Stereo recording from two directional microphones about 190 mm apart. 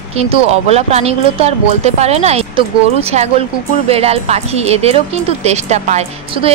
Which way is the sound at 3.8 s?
30° right (ahead or behind).